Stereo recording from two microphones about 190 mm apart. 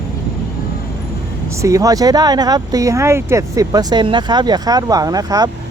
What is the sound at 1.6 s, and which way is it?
Speech, 15° right (ahead or behind).